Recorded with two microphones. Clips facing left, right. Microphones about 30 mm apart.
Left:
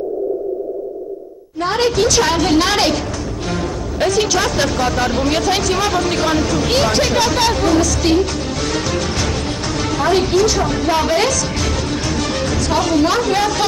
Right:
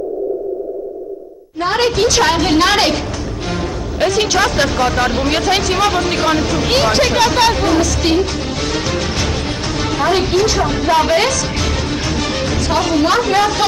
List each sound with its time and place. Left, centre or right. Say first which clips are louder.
1.6 s speech: right 1 dB; centre
4.0 s speech: right 2 dB; centre
8.7 s music: right 1 dB; centre
9.8 s a woman's voice: even; centre